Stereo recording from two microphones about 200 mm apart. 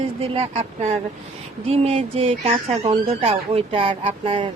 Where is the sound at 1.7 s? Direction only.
30° right (ahead or behind).